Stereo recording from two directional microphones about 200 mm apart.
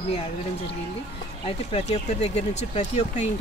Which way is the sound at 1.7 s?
30° left (ahead or behind).